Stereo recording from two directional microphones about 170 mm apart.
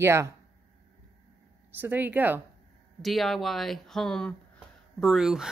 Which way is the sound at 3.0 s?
Centre (ahead or behind).